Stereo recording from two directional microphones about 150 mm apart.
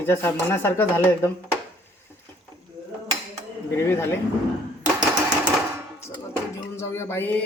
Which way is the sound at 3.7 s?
15° left (ahead or behind).